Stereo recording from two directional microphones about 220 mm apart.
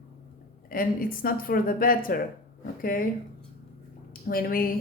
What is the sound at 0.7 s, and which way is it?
A woman's voice, 40° left (ahead or behind).